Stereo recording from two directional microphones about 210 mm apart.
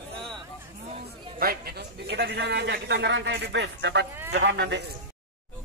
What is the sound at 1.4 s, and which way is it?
A man's voice, 45° right (ahead or behind).